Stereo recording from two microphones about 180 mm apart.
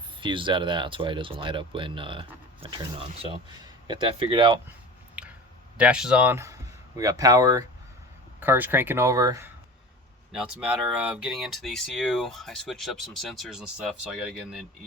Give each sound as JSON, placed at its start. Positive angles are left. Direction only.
{"t": 0.2, "sound": "speech", "side_deg": -25}
{"t": 5.2, "sound": "clicking", "side_deg": -5}
{"t": 5.7, "sound": "speech", "side_deg": -5}
{"t": 10.3, "sound": "speech", "side_deg": -5}